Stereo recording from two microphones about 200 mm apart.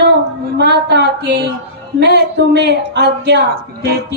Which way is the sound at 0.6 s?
55° right (ahead or behind).